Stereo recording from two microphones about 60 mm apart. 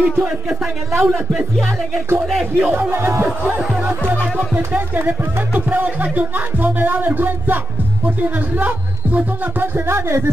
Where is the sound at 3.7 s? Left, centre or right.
Right.